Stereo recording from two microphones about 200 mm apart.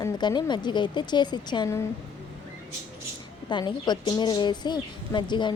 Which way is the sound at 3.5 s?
20° left (ahead or behind).